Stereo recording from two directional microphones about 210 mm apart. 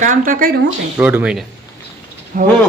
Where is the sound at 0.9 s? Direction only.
5° right (ahead or behind).